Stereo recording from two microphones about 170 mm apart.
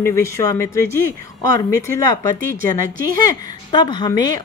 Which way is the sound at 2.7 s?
20° left (ahead or behind).